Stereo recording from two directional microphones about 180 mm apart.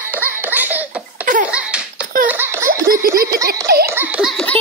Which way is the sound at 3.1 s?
15° right (ahead or behind).